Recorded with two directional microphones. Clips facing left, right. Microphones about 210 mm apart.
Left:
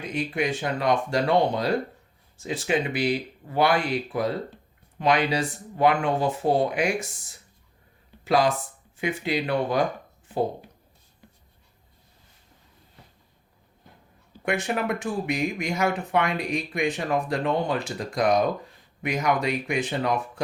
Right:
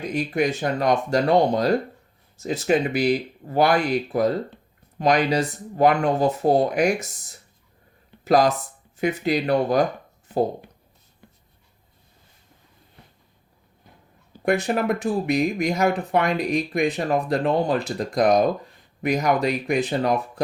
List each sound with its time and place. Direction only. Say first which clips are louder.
0.0 s speech: right 4 dB; 40° right (ahead or behind)
14.4 s speech: right 5 dB; 40° right (ahead or behind)